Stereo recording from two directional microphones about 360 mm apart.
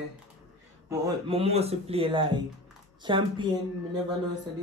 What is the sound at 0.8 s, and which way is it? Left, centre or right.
Speech, centre.